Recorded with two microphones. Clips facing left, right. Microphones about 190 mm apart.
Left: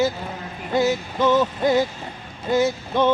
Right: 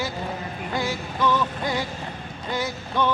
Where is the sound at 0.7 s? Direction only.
20° left (ahead or behind).